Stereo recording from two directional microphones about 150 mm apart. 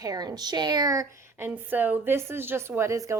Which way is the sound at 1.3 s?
15° right (ahead or behind).